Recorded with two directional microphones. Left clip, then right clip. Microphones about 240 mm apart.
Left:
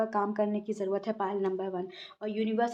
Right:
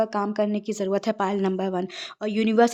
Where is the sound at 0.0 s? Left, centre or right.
Right.